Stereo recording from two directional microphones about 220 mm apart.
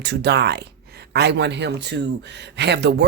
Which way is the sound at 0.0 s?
50° right (ahead or behind).